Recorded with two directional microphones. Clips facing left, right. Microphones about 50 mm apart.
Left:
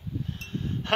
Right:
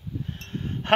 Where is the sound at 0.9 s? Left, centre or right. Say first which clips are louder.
Right 6 dB; right.